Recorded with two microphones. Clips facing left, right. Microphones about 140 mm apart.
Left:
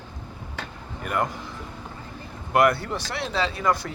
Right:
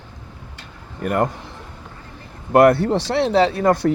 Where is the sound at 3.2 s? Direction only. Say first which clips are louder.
Right 10 dB; 70° right (ahead or behind).